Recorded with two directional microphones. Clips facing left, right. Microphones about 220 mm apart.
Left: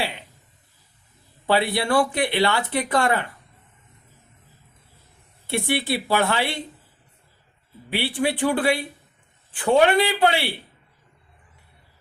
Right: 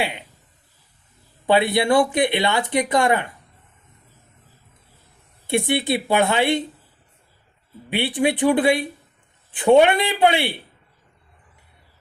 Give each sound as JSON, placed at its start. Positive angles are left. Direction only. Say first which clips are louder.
{"t": 1.5, "sound": "speech", "louder": "right 4 dB", "side_deg": -20}
{"t": 5.5, "sound": "speech", "louder": "right 3 dB", "side_deg": -20}
{"t": 7.9, "sound": "speech", "louder": "right 3 dB", "side_deg": -20}